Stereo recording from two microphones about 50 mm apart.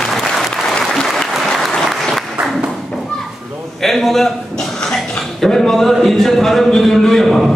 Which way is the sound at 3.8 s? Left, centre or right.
Centre.